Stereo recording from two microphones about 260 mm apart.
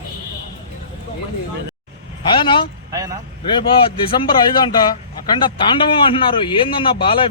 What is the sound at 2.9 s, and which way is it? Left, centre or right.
Speech, centre.